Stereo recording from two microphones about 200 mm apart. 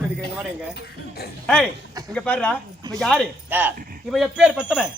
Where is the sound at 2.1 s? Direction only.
5° left (ahead or behind).